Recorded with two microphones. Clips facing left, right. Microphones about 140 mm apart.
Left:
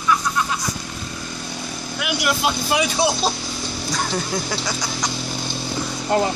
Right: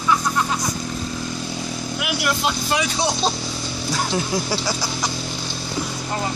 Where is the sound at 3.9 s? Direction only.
5° right (ahead or behind).